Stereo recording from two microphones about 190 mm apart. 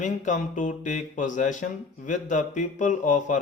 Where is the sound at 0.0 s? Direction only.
40° left (ahead or behind).